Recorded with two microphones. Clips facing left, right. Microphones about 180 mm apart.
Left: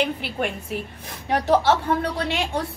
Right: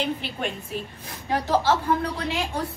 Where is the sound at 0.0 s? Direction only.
65° left (ahead or behind).